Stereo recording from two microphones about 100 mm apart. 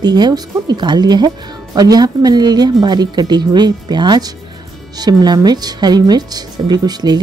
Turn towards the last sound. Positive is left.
turn(degrees=-45)  # may be behind; listen again after turning